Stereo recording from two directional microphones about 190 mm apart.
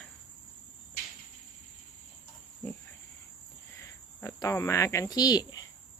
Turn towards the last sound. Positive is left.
turn(degrees=20)  # may be behind; listen again after turning